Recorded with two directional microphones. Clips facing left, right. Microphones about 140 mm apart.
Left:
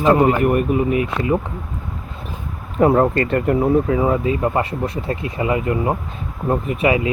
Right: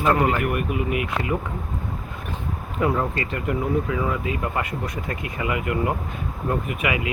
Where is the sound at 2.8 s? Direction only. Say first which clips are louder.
Left 9 dB; 50° left (ahead or behind).